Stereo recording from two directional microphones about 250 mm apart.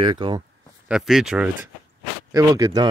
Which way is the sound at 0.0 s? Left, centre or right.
Centre.